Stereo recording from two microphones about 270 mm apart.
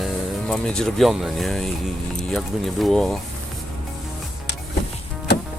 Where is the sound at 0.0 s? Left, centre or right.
Centre.